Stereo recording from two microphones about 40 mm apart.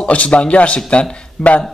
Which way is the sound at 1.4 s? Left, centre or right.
Centre.